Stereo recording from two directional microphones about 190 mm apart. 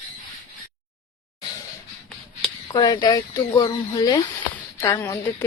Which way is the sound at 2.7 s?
20° left (ahead or behind).